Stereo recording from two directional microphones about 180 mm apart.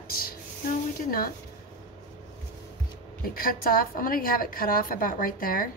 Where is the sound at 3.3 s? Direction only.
55° left (ahead or behind).